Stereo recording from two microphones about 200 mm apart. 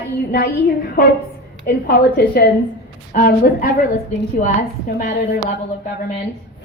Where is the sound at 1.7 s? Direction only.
50° left (ahead or behind).